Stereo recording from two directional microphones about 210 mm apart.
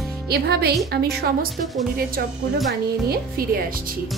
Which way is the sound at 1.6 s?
Centre (ahead or behind).